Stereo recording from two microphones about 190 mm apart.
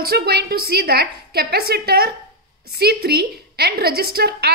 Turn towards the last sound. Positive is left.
turn(degrees=-55)  # may be behind; listen again after turning